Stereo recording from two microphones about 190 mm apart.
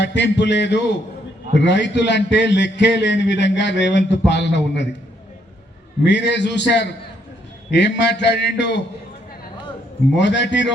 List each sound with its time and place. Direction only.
0.0 s a man's voice: 65° left (ahead or behind)
6.1 s a man's voice: 65° left (ahead or behind)
10.2 s a man's voice: 65° left (ahead or behind)